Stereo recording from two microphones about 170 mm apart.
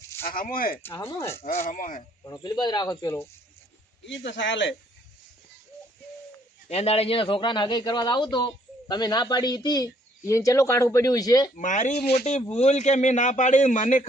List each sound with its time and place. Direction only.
0.3 s speech: 55° left (ahead or behind)
0.8 s speech: 15° left (ahead or behind)
1.6 s a man's voice: 50° left (ahead or behind)
2.2 s a man's voice: 25° left (ahead or behind)
4.0 s speech: 90° left
6.7 s a man's voice: 35° left (ahead or behind); by 11.5 s 20° left (ahead or behind)
11.5 s a man's voice: 45° left (ahead or behind)